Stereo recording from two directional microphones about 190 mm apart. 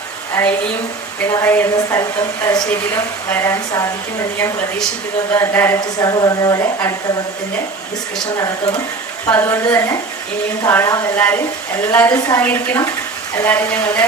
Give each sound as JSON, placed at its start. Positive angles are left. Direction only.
{"t": 0.4, "sound": "a woman's voice", "side_deg": 10}
{"t": 5.3, "sound": "a woman's voice", "side_deg": 10}
{"t": 8.4, "sound": "a woman's voice", "side_deg": 20}